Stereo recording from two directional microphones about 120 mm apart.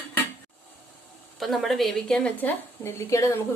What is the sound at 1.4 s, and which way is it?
A woman's voice, centre (ahead or behind).